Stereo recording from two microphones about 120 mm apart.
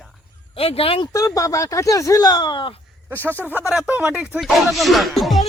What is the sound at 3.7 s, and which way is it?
Speech, 10° right (ahead or behind).